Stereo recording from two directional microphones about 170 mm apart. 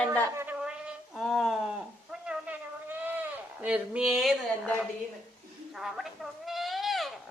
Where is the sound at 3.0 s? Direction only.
10° right (ahead or behind).